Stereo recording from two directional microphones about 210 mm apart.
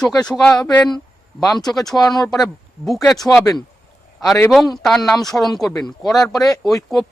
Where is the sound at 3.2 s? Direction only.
15° left (ahead or behind).